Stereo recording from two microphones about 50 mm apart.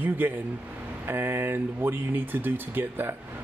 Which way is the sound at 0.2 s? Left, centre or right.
Right.